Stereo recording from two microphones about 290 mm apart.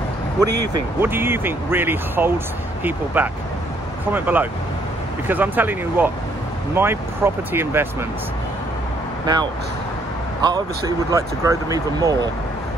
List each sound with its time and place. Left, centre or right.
0.4 s speech: right
1.0 s speech: centre
9.2 s speech: centre
11.1 s speech: centre